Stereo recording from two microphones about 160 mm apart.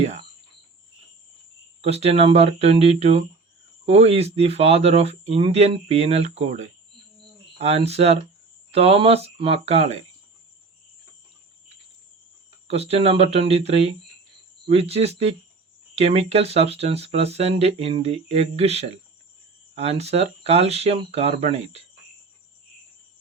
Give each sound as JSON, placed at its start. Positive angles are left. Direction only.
{"t": 1.8, "sound": "speech", "side_deg": -40}
{"t": 12.6, "sound": "speech", "side_deg": -40}